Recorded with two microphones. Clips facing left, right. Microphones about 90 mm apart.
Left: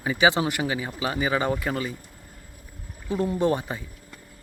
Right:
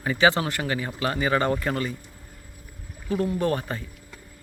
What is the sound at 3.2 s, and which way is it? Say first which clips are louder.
Speech: left 2 dB; 20° left (ahead or behind).